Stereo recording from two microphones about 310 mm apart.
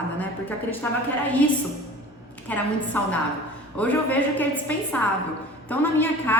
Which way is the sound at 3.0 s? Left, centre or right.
Centre.